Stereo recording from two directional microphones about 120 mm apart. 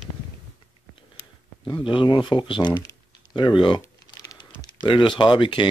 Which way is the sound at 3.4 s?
40° left (ahead or behind).